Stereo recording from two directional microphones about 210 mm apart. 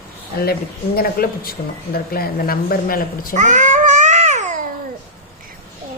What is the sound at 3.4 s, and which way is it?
Babbling, 35° right (ahead or behind).